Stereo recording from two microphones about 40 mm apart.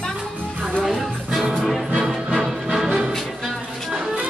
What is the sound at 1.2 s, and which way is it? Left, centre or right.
Music, centre.